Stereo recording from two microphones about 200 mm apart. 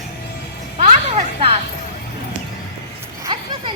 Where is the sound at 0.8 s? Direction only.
30° right (ahead or behind).